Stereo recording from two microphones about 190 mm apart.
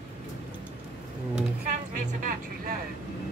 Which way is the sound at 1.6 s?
45° right (ahead or behind).